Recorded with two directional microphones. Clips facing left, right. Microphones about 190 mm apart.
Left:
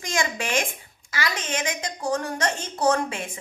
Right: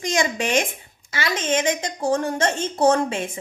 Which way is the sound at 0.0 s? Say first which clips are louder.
Right 5 dB; 20° right (ahead or behind).